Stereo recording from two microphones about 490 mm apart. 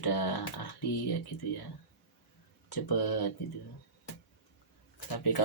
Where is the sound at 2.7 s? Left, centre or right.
Left.